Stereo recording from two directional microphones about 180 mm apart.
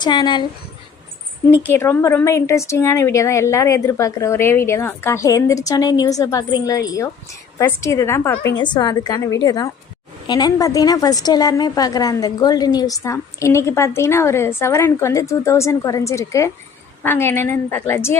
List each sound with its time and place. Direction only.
0.0 s a woman's voice: 25° left (ahead or behind)
1.7 s a woman's voice: 15° left (ahead or behind)
8.5 s a woman's voice: 25° left (ahead or behind)